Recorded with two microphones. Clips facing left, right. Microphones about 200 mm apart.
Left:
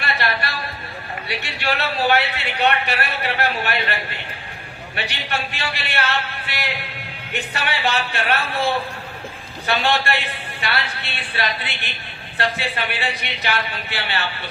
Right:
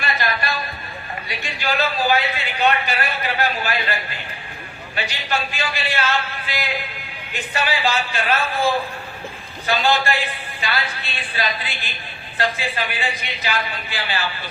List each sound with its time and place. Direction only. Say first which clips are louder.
0.0 s a sound: even; 65° left (ahead or behind)
1.3 s a man's voice: left 1 dB; 70° left (ahead or behind)
5.0 s a man's voice: right 2 dB; 65° left (ahead or behind)